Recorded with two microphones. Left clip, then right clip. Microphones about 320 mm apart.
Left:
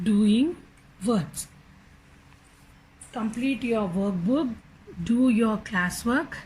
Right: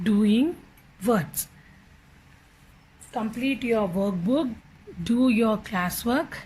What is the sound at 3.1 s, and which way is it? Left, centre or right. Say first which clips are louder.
Speech: right 1 dB; centre.